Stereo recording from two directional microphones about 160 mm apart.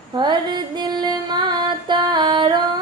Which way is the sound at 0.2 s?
30° right (ahead or behind).